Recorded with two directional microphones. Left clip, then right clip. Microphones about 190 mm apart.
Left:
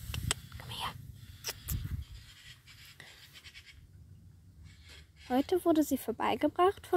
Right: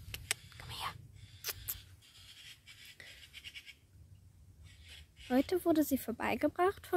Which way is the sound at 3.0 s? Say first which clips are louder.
Left 1 dB; centre (ahead or behind).